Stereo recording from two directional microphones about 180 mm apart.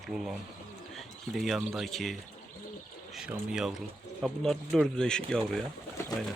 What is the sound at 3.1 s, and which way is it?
Speech, 5° right (ahead or behind).